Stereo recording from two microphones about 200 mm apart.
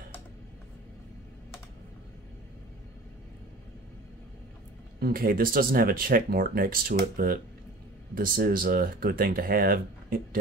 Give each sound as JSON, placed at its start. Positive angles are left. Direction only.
{"t": 5.0, "sound": "speech", "side_deg": -45}